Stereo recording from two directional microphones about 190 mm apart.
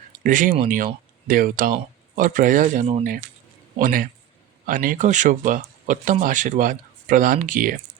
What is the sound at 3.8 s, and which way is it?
Speech, 45° right (ahead or behind).